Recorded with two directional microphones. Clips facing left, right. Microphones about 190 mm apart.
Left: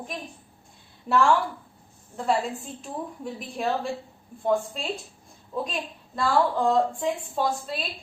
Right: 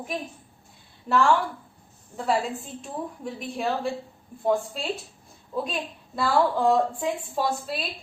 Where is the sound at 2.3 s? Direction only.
Centre (ahead or behind).